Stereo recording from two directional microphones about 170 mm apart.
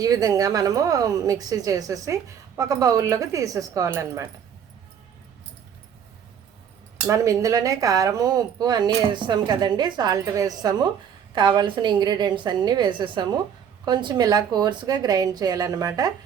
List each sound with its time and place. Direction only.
0.0 s speech: 20° right (ahead or behind)
7.1 s speech: 20° right (ahead or behind)